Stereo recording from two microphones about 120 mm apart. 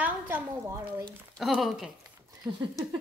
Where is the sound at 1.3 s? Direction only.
Centre (ahead or behind).